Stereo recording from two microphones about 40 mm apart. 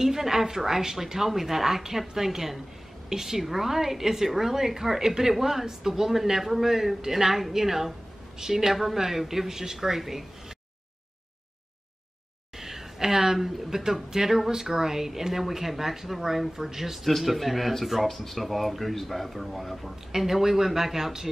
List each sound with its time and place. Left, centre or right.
0.0 s speech: centre
12.5 s a woman's voice: centre